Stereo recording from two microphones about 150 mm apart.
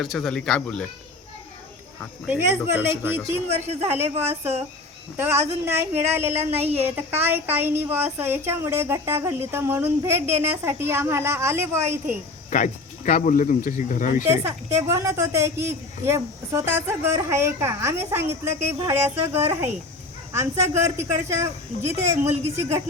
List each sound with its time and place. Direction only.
0.0 s speech: centre (ahead or behind)
2.2 s a woman's voice: 15° right (ahead or behind)
12.5 s speech: 55° left (ahead or behind)
14.3 s a woman's voice: 20° right (ahead or behind)
20.3 s a woman's voice: 20° right (ahead or behind)